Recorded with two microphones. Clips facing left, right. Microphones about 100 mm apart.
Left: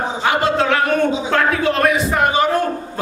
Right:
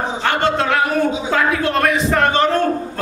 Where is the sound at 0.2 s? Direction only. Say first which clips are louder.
Left 1 dB; 5° left (ahead or behind).